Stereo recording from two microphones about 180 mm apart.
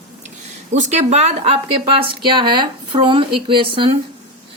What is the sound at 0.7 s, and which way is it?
Speech, 40° right (ahead or behind).